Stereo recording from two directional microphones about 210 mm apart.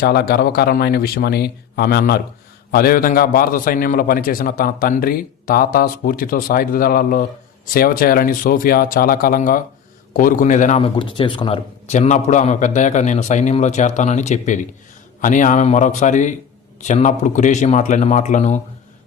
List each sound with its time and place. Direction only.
0.0 s a man's voice: 50° left (ahead or behind)